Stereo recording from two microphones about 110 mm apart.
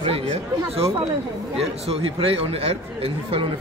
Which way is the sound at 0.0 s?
60° right (ahead or behind).